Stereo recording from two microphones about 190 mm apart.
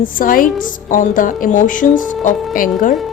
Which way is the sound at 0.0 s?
45° left (ahead or behind).